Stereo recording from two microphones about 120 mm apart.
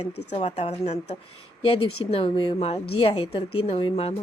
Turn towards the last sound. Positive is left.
turn(degrees=50)  # may be behind; listen again after turning